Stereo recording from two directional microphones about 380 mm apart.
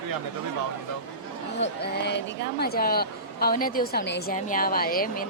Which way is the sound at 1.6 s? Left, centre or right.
Left.